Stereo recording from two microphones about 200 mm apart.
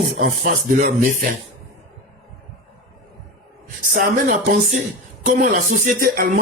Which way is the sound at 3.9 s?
40° right (ahead or behind).